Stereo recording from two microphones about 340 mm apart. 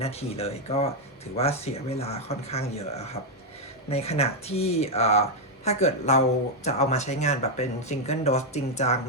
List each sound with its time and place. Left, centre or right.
0.0 s speech: centre